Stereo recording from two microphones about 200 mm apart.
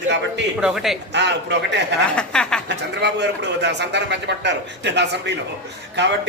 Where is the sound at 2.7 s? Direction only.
60° right (ahead or behind).